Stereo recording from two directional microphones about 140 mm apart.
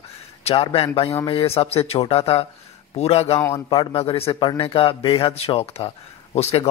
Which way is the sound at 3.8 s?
40° left (ahead or behind).